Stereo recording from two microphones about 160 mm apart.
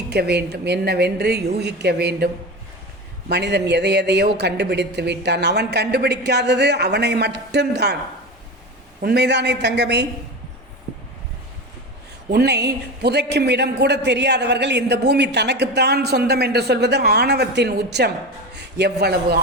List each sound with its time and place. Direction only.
0.1 s a man's voice: 90° right
9.0 s a man's voice: 85° right
12.3 s a man's voice: 90° right